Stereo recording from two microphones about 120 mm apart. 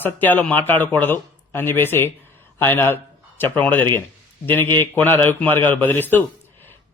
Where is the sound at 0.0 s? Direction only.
15° left (ahead or behind).